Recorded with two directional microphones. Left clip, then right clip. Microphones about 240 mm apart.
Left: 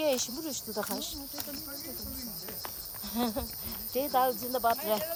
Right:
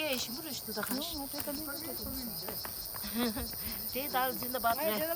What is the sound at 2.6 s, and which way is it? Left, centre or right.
Speech, centre.